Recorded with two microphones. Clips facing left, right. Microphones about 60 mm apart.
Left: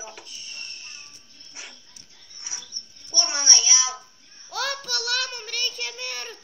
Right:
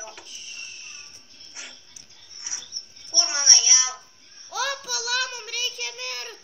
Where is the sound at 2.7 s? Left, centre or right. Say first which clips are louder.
Even; right.